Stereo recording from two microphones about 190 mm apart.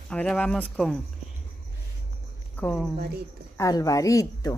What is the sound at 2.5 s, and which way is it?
A woman's voice, 10° left (ahead or behind).